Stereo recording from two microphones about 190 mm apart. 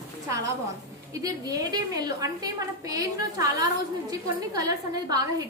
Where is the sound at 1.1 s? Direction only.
20° right (ahead or behind).